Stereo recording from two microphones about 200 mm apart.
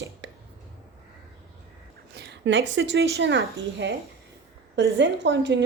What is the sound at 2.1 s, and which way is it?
A woman's voice, 55° right (ahead or behind).